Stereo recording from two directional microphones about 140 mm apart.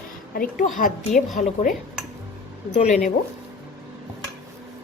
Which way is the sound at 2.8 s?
55° left (ahead or behind).